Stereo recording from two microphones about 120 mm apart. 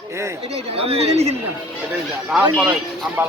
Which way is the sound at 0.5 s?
55° right (ahead or behind).